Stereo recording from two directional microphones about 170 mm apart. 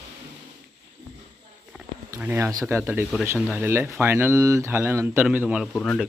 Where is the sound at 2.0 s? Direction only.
15° right (ahead or behind).